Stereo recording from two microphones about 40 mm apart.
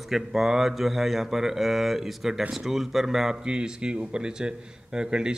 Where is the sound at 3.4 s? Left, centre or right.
Right.